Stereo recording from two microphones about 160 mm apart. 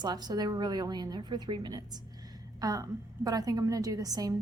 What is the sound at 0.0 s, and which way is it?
A woman's voice, 25° right (ahead or behind).